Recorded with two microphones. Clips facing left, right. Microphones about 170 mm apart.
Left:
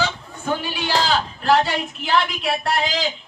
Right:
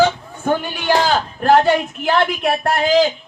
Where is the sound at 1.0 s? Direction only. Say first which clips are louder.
Right 4 dB; 50° right (ahead or behind).